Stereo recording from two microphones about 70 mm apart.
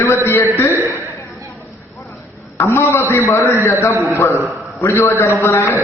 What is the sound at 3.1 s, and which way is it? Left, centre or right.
A man's voice, left.